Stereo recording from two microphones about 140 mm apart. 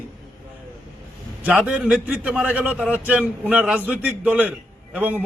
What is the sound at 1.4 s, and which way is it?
A man's voice, 10° right (ahead or behind).